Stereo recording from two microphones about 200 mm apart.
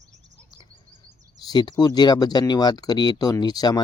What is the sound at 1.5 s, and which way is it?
Speech, 20° left (ahead or behind).